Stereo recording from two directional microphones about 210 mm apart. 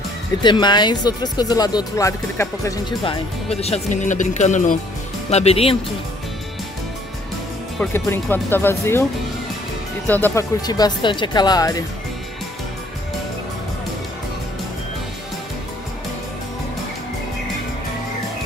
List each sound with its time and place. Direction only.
0.4 s speech: 20° left (ahead or behind)
3.0 s speech: 25° left (ahead or behind)
7.8 s speech: 10° left (ahead or behind)
10.0 s speech: 10° left (ahead or behind)